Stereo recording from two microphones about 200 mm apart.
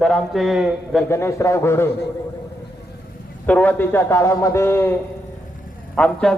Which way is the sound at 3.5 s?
10° left (ahead or behind).